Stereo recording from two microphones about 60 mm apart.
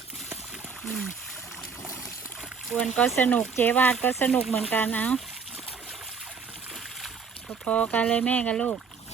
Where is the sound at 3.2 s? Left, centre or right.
Left.